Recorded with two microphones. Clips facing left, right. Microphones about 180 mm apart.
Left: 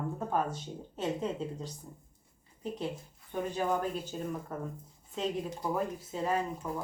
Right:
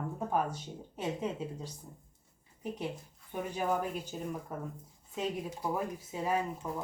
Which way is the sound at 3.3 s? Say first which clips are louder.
Left 1 dB; 10° right (ahead or behind).